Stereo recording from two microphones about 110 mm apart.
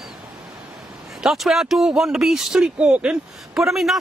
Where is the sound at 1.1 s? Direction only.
Centre (ahead or behind).